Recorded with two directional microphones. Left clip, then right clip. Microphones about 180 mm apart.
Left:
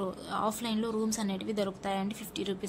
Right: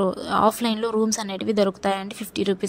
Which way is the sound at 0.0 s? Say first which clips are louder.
Right 13 dB; 45° right (ahead or behind).